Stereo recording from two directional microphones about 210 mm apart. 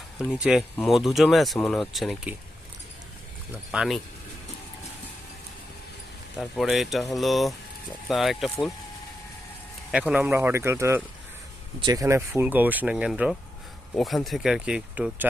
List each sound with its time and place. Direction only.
0.2 s speech: 5° right (ahead or behind)
3.7 s speech: centre (ahead or behind)
6.4 s speech: centre (ahead or behind)
9.9 s speech: 5° right (ahead or behind)